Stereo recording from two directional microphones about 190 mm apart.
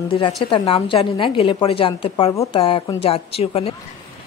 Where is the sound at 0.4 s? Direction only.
30° left (ahead or behind).